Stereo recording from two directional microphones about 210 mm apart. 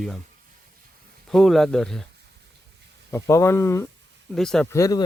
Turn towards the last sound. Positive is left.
turn(degrees=15)  # may be behind; listen again after turning